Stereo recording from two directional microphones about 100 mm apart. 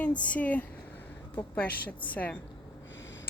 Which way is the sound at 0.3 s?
15° left (ahead or behind).